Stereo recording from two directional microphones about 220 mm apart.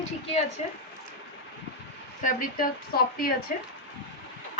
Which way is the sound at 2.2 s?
40° left (ahead or behind).